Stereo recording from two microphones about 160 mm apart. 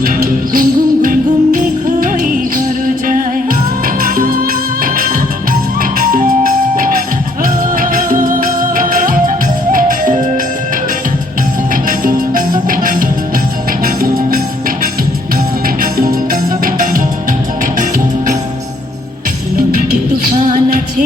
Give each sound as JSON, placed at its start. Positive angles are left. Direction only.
{"t": 0.0, "sound": "music", "side_deg": -60}
{"t": 11.7, "sound": "music", "side_deg": -60}
{"t": 15.8, "sound": "music", "side_deg": -60}